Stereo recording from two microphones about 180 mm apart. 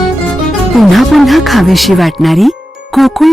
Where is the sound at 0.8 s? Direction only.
Centre (ahead or behind).